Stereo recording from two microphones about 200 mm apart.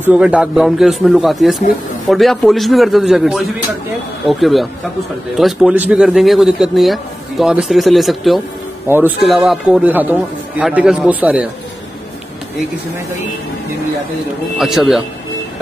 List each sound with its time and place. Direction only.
0.1 s a man's voice: 5° right (ahead or behind)
14.6 s a man's voice: centre (ahead or behind)